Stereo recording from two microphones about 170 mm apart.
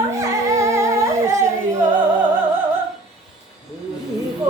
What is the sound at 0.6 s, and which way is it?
Singing, 15° right (ahead or behind).